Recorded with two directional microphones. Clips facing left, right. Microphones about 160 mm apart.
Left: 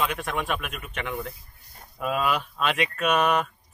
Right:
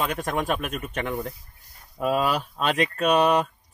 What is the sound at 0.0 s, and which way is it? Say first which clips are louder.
A man's voice: right 2 dB; 40° right (ahead or behind).